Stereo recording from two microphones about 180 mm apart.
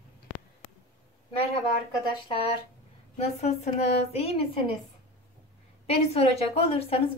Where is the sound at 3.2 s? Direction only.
35° left (ahead or behind).